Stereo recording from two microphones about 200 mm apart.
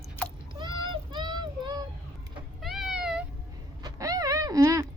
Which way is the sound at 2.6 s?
Centre (ahead or behind).